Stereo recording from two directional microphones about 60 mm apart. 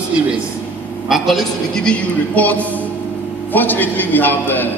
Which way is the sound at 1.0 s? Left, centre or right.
Centre.